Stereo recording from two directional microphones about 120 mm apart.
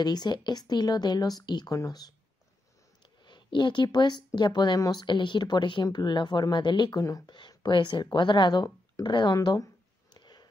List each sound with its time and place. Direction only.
0.0 s speech: 35° left (ahead or behind)
3.3 s speech: 40° left (ahead or behind)
7.2 s speech: 40° left (ahead or behind)
10.1 s a sound: 35° left (ahead or behind)